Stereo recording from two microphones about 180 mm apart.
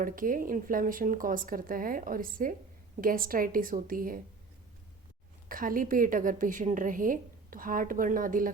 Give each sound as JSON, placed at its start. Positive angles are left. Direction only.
{"t": 0.0, "sound": "a woman's voice", "side_deg": -50}
{"t": 5.5, "sound": "a woman's voice", "side_deg": -50}